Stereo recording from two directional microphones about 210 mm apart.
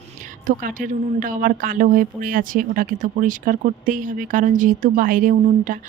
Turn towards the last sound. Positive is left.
turn(degrees=-40)  # may be behind; listen again after turning